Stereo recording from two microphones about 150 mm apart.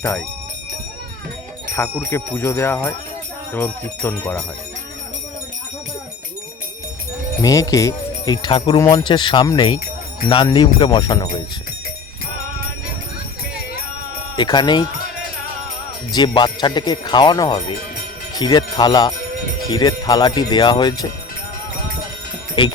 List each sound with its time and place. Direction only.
1.7 s speech: 20° left (ahead or behind)
3.5 s jingle bell: 15° left (ahead or behind)
7.4 s speech: 20° left (ahead or behind)
14.3 s speech: 30° left (ahead or behind)
16.1 s speech: 30° left (ahead or behind)